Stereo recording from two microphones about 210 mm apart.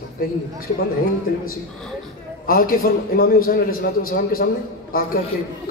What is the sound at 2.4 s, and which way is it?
A man's voice, 45° left (ahead or behind).